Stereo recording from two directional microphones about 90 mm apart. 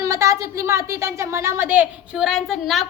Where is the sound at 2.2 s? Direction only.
5° right (ahead or behind).